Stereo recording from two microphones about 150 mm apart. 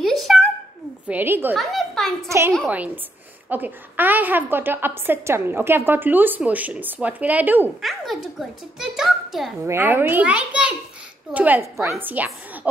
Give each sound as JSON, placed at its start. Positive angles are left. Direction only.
{"t": 0.0, "sound": "a sound", "side_deg": 0}
{"t": 1.0, "sound": "a woman's voice", "side_deg": -15}
{"t": 1.6, "sound": "a sound", "side_deg": 0}
{"t": 2.2, "sound": "a woman's voice", "side_deg": -20}
{"t": 7.8, "sound": "a child's voice", "side_deg": 0}
{"t": 9.7, "sound": "a woman's voice", "side_deg": -15}